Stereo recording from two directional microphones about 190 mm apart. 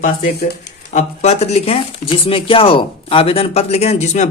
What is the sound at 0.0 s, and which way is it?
A man's voice, 45° left (ahead or behind).